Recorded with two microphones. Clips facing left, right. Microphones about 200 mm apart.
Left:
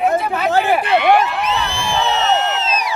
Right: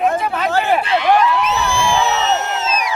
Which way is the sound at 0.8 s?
60° left (ahead or behind).